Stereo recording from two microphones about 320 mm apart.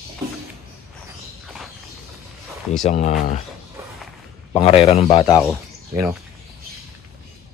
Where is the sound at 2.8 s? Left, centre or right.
Left.